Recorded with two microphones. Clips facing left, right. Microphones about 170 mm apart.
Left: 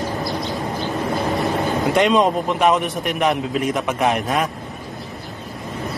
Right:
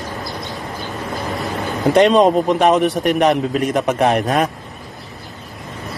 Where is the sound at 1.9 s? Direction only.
40° right (ahead or behind).